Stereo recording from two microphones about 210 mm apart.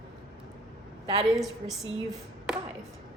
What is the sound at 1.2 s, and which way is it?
A woman's voice, centre (ahead or behind).